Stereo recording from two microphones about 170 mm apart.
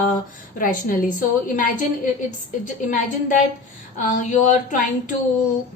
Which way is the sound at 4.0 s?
50° left (ahead or behind).